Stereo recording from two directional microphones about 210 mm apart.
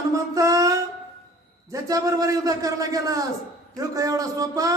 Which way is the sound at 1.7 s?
15° right (ahead or behind).